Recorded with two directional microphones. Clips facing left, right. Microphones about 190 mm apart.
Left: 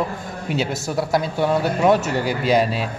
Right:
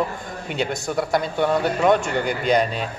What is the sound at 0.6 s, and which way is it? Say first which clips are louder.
A man's voice: even; 5° left (ahead or behind).